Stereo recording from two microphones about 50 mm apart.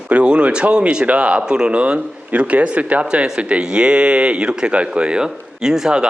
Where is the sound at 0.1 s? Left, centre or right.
Right.